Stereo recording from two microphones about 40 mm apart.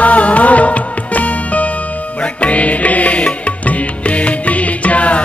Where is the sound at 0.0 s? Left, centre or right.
Left.